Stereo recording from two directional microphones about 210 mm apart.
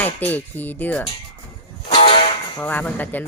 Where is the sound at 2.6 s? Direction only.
10° left (ahead or behind).